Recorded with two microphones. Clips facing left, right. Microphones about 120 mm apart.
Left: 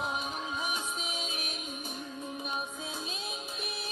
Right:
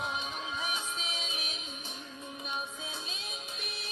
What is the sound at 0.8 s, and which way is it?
Music, 10° left (ahead or behind).